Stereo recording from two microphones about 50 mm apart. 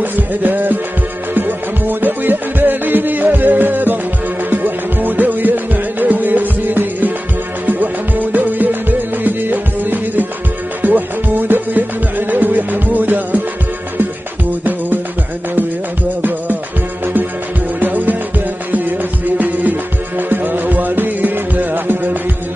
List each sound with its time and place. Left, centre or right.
0.0 s music: right
16.2 s music: right